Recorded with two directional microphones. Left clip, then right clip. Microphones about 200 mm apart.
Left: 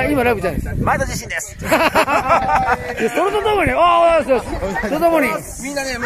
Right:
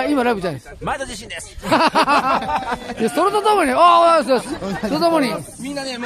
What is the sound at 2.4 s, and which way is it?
Speech, 5° left (ahead or behind).